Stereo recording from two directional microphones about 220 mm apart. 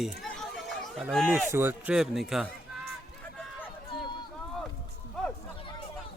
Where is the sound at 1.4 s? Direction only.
10° right (ahead or behind).